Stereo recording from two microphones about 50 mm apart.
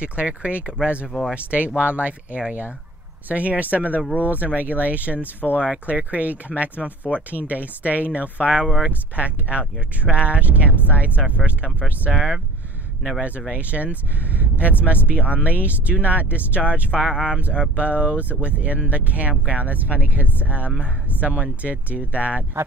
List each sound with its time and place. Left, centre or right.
0.0 s speech: right
13.5 s speech: right